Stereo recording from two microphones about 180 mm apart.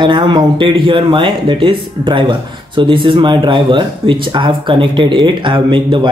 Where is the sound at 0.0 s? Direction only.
25° right (ahead or behind).